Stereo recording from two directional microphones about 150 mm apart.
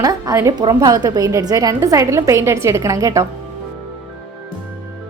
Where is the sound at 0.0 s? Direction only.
25° right (ahead or behind).